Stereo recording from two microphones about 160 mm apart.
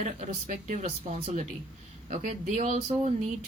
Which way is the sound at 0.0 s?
50° right (ahead or behind).